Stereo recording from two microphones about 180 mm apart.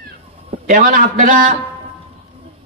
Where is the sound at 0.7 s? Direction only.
45° right (ahead or behind).